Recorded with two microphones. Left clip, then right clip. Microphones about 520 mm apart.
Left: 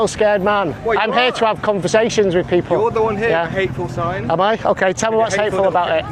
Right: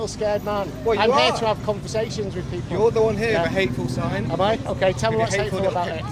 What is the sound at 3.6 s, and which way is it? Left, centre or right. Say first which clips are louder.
Speech: left 3 dB; right.